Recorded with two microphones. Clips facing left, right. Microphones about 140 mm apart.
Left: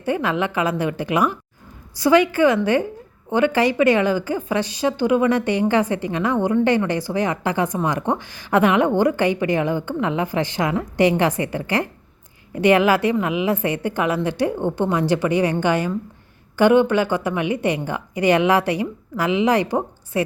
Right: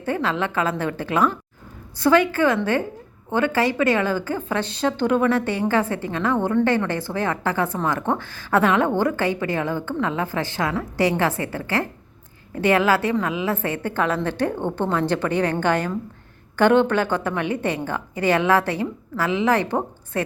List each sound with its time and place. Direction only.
0.0 s a woman's voice: 15° left (ahead or behind)